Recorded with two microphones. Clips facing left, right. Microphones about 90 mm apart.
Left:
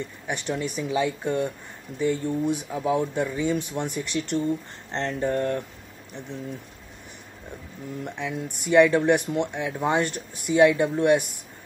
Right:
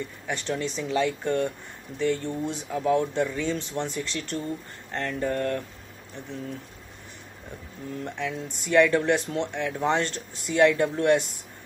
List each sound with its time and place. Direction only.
0.3 s speech: 15° left (ahead or behind)
4.9 s a sound: 25° left (ahead or behind)
6.1 s speech: 20° left (ahead or behind)
8.0 s speech: 15° left (ahead or behind)